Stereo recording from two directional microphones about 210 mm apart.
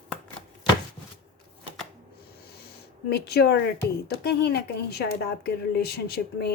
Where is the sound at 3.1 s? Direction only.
50° left (ahead or behind).